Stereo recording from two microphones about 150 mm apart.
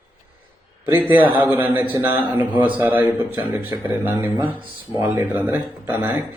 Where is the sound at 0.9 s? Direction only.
15° right (ahead or behind).